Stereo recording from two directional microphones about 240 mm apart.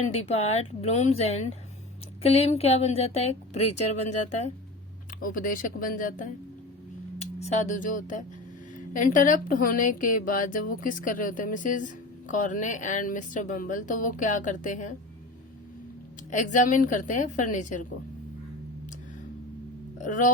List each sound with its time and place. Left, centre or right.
0.1 s speech: left
3.6 s speech: left
5.2 s speech: left
16.3 s speech: left
20.0 s speech: left